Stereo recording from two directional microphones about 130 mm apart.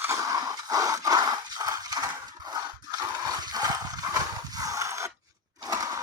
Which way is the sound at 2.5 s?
30° right (ahead or behind).